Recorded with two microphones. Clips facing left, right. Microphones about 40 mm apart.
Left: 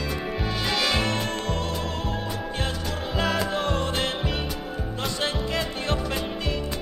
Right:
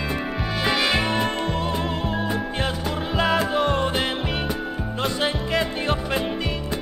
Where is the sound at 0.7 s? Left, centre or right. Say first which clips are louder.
Right 4 dB; centre.